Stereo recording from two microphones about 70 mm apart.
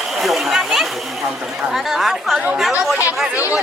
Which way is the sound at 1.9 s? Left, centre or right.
Centre.